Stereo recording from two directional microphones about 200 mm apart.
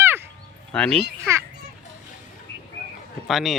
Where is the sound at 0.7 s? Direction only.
5° left (ahead or behind).